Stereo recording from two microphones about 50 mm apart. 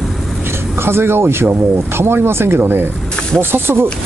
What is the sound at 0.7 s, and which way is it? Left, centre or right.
Speech, right.